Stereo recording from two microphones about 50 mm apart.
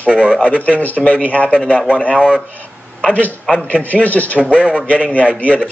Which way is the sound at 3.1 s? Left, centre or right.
Left.